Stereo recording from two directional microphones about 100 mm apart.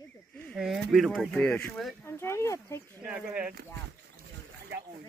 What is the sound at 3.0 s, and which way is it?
Speech, 10° right (ahead or behind).